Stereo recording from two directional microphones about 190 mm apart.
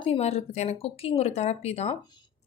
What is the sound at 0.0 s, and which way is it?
Speech, 35° left (ahead or behind).